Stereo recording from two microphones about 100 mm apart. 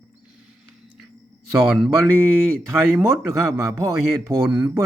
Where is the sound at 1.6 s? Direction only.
5° right (ahead or behind).